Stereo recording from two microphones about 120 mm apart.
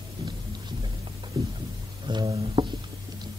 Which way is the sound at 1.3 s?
35° right (ahead or behind).